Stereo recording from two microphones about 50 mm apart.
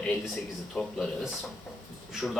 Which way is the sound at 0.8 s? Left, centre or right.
Centre.